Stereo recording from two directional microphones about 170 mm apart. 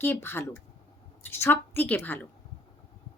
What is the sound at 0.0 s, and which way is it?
A woman's voice, 15° left (ahead or behind).